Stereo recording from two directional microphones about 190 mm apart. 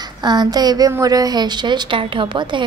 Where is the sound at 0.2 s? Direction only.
20° right (ahead or behind).